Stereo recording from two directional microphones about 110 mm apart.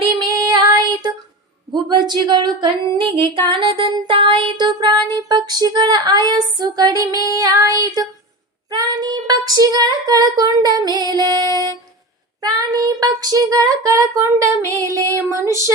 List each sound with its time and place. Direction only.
0.2 s music: 40° right (ahead or behind)
1.7 s speech: 45° right (ahead or behind)
15.2 s a sound: 25° right (ahead or behind)